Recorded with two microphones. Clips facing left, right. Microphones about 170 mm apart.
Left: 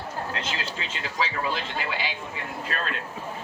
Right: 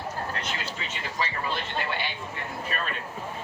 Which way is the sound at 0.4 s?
90° left.